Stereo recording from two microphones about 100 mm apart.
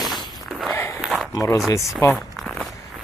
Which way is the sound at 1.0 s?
Centre (ahead or behind).